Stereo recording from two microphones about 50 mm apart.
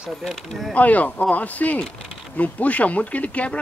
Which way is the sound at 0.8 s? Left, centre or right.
Left.